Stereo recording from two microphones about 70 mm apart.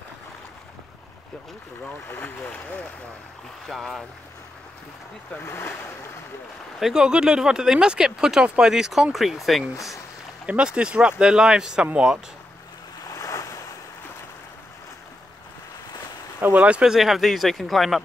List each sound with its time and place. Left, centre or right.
2.0 s speech: left
3.6 s speech: centre
5.4 s speech: left
6.8 s speech: centre
10.4 s speech: centre
13.1 s waves: left
16.5 s speech: centre
16.9 s speech: centre